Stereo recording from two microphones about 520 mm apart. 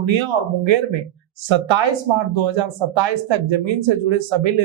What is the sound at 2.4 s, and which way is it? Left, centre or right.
Speech, right.